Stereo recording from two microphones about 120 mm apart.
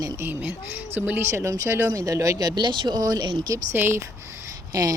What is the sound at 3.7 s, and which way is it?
Speech, 20° right (ahead or behind).